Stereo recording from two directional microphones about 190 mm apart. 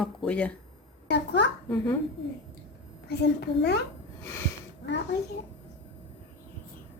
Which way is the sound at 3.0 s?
60° left (ahead or behind).